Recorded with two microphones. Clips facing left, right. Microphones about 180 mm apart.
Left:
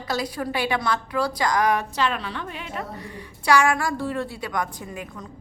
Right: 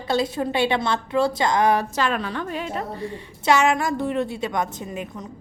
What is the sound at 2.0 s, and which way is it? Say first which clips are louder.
A woman's voice: right 2 dB; 45° right (ahead or behind).